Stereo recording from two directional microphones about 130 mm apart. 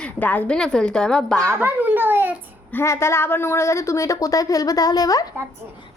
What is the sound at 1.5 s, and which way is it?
Speech, 15° right (ahead or behind).